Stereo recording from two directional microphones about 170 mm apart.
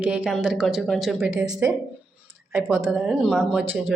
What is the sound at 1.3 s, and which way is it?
A woman's voice, 20° right (ahead or behind).